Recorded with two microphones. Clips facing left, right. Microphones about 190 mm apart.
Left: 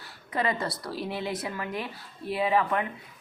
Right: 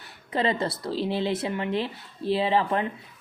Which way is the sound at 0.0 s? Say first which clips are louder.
Right 3 dB; 25° right (ahead or behind).